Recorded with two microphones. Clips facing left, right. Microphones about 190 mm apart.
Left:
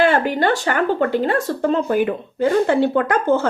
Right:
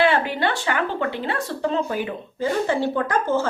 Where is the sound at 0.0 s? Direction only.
45° left (ahead or behind).